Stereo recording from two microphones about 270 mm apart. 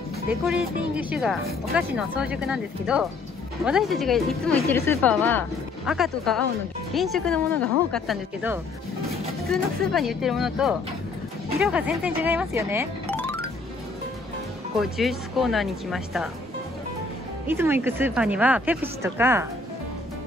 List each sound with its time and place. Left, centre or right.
1.1 s speech: centre
13.1 s music: centre
14.8 s speech: centre
17.5 s a woman's voice: centre